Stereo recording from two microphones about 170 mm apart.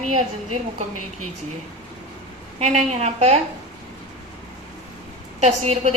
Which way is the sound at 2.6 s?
45° right (ahead or behind).